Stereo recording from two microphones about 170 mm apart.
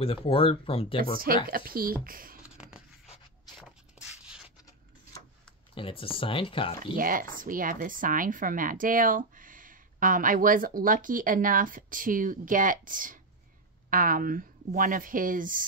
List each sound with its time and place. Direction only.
0.0 s speech: 35° left (ahead or behind)
1.1 s speech: 60° right (ahead or behind)
2.4 s a sound: 5° right (ahead or behind)
5.8 s speech: 30° left (ahead or behind)
7.0 s speech: 55° right (ahead or behind)